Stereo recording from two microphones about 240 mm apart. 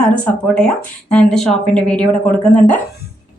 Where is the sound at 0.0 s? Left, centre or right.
Centre.